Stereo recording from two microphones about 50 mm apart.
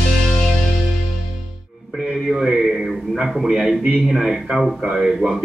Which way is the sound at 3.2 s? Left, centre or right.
Centre.